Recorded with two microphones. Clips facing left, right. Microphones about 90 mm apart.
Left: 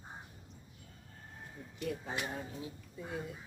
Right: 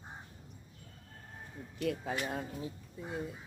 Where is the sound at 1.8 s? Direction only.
70° right (ahead or behind).